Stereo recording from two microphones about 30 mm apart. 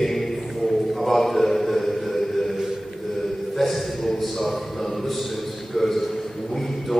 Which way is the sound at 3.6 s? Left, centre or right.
Centre.